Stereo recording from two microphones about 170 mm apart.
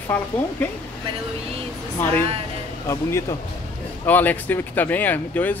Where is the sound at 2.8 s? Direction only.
15° left (ahead or behind).